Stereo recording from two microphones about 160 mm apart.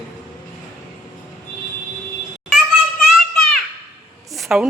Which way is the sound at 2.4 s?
Centre (ahead or behind).